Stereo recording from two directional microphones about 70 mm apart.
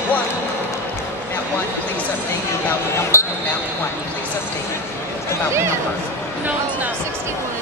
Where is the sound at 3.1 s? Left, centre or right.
Left.